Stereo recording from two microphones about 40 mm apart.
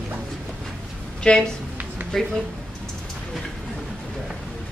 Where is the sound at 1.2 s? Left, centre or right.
Left.